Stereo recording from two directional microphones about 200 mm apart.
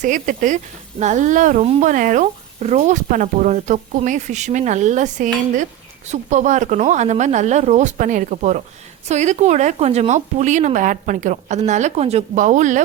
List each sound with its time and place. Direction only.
0.0 s speech: 40° right (ahead or behind)